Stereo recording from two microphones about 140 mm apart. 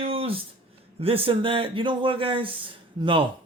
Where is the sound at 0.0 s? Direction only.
40° right (ahead or behind).